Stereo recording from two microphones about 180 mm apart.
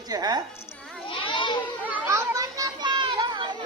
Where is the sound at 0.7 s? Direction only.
5° left (ahead or behind).